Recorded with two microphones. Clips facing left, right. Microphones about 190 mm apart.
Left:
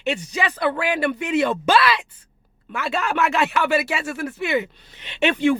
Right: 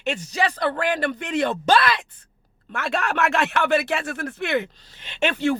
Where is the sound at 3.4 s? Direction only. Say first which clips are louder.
Even; 5° left (ahead or behind).